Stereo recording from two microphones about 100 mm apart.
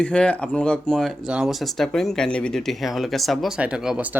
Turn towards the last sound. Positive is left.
turn(degrees=-10)  # may be behind; listen again after turning